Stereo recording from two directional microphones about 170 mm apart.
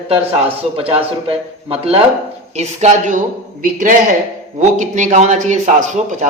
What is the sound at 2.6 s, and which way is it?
Speech, 45° right (ahead or behind).